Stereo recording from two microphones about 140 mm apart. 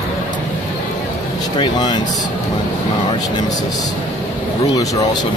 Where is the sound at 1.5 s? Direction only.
30° left (ahead or behind).